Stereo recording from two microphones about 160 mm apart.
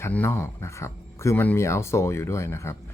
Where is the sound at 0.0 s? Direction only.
10° left (ahead or behind).